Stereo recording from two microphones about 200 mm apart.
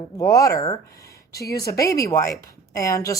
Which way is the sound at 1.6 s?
15° left (ahead or behind).